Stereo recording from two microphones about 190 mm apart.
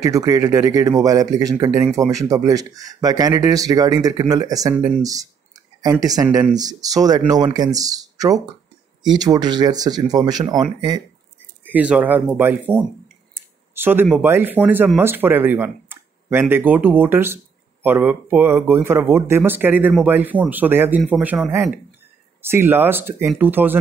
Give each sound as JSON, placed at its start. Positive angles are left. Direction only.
{"t": 0.0, "sound": "speech", "side_deg": -20}
{"t": 11.6, "sound": "speech", "side_deg": -5}